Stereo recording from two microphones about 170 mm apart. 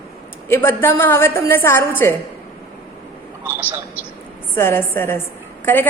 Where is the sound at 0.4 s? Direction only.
15° left (ahead or behind).